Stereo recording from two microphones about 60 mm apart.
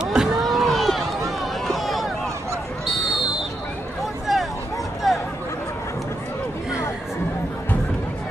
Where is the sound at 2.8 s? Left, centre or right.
Centre.